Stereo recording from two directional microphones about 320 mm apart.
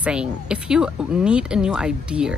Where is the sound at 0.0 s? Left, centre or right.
Centre.